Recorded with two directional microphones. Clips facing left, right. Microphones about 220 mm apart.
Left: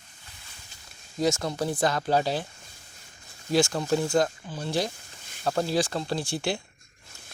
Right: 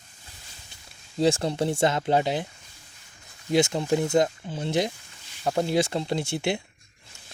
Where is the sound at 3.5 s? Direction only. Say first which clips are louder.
Right 1 dB; 20° right (ahead or behind).